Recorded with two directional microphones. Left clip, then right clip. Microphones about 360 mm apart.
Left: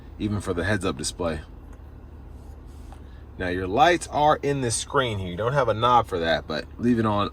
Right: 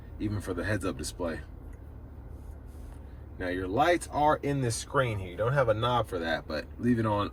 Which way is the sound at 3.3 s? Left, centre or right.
Centre.